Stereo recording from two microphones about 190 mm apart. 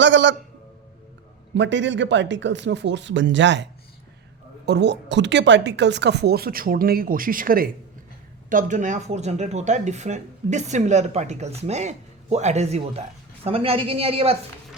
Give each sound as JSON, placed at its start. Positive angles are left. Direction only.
{"t": 0.0, "sound": "speech", "side_deg": -75}
{"t": 1.5, "sound": "speech", "side_deg": -70}